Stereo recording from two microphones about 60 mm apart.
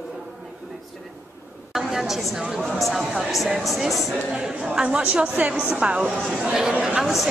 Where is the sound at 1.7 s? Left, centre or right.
Centre.